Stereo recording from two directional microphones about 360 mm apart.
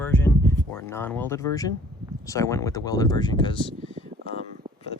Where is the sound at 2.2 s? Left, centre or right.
Centre.